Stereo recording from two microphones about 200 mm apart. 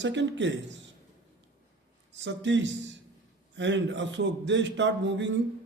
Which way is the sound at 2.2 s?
65° right (ahead or behind).